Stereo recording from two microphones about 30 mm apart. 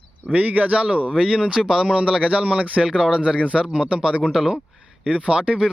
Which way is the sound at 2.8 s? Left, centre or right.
Right.